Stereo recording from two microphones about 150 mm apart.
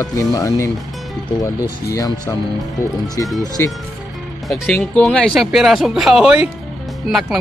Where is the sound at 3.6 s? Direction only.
15° left (ahead or behind); by 7.3 s centre (ahead or behind).